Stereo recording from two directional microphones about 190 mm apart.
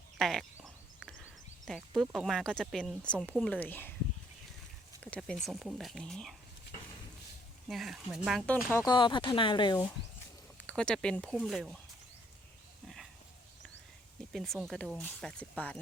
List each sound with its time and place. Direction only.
0.2 s speech: centre (ahead or behind)
5.1 s speech: 5° left (ahead or behind)
7.7 s speech: centre (ahead or behind); by 9.8 s 25° left (ahead or behind)
10.7 s speech: 5° left (ahead or behind)
14.3 s speech: centre (ahead or behind)